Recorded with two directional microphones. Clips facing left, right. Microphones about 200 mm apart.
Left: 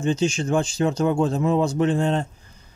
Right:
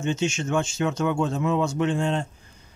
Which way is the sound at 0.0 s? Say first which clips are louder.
Left 4 dB; 35° left (ahead or behind).